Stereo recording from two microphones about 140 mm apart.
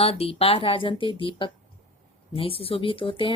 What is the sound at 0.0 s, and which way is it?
Speech, 45° left (ahead or behind).